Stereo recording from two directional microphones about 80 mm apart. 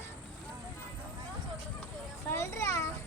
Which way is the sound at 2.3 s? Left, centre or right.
Left.